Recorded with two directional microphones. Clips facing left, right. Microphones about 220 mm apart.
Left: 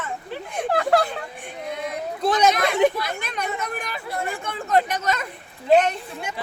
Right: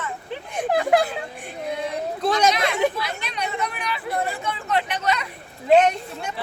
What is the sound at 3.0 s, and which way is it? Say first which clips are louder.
Speech: left 1 dB; 50° left (ahead or behind).